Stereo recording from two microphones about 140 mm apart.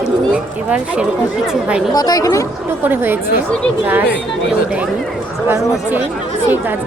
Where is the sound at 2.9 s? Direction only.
15° right (ahead or behind).